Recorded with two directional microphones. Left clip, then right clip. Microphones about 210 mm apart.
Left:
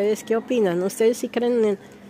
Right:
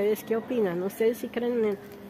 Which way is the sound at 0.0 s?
35° left (ahead or behind).